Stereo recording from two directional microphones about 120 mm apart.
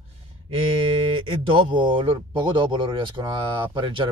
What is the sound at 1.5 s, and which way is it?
Speech, 45° right (ahead or behind).